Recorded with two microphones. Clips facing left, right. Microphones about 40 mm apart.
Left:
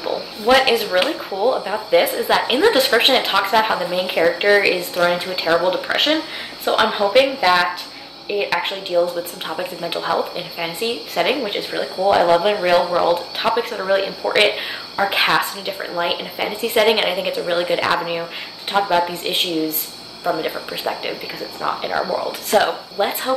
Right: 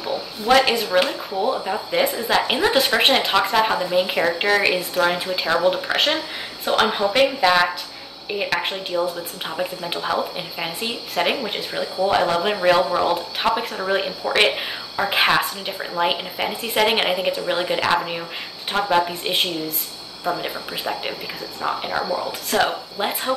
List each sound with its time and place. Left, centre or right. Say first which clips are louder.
0.0 s speech: left 4 dB; centre